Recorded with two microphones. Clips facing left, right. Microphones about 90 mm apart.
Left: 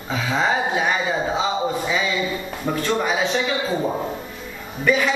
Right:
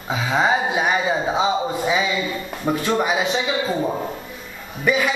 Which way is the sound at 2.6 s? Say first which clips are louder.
Right 2 dB; 10° right (ahead or behind).